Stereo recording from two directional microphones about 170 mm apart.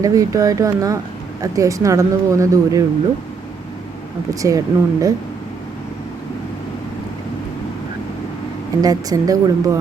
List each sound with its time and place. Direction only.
0.0 s speech: 20° right (ahead or behind)
4.4 s speech: 20° right (ahead or behind)
8.8 s speech: 20° right (ahead or behind)